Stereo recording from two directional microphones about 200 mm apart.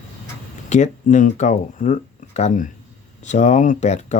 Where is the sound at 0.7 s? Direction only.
35° left (ahead or behind).